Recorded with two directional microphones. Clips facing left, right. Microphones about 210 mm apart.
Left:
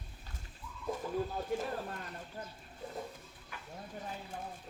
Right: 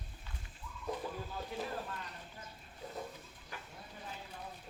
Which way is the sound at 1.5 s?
50° left (ahead or behind).